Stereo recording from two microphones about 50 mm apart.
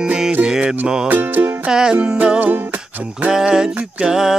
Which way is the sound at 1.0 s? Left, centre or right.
Right.